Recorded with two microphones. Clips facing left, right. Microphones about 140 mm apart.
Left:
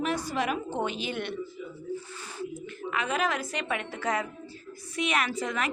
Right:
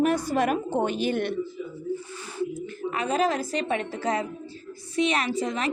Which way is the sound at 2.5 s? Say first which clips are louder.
Right 3 dB; 35° right (ahead or behind).